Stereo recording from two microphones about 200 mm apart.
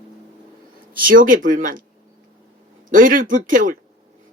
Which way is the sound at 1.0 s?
45° right (ahead or behind).